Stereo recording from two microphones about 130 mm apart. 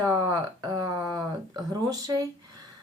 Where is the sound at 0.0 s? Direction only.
30° right (ahead or behind).